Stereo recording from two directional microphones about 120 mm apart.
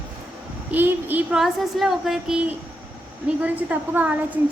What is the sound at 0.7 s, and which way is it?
Speech, 15° right (ahead or behind).